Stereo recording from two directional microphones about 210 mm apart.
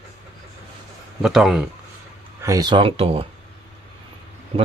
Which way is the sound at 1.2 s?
Centre (ahead or behind).